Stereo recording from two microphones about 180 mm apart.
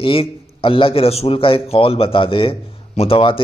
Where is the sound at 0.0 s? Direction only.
30° left (ahead or behind).